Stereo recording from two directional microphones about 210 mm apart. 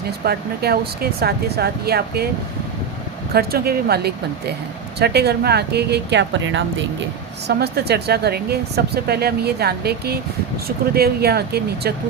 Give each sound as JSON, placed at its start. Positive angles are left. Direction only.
{"t": 0.3, "sound": "speech", "side_deg": -50}
{"t": 3.3, "sound": "speech", "side_deg": -45}
{"t": 7.4, "sound": "speech", "side_deg": -50}